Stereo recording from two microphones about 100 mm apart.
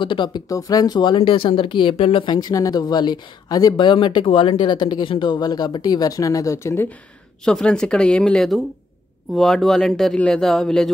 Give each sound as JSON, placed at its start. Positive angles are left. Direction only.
{"t": 0.0, "sound": "speech", "side_deg": 55}
{"t": 0.5, "sound": "speech", "side_deg": 35}
{"t": 2.2, "sound": "speech", "side_deg": 40}
{"t": 7.4, "sound": "speech", "side_deg": 5}